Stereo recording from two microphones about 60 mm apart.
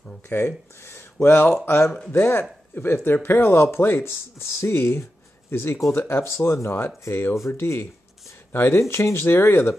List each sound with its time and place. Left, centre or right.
0.3 s speech: left
1.9 s speech: centre
2.1 s speech: left
8.7 s speech: left